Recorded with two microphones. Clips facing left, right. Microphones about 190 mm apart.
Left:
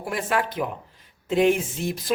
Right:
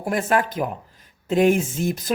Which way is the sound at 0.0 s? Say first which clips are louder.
Right 4 dB; 45° right (ahead or behind).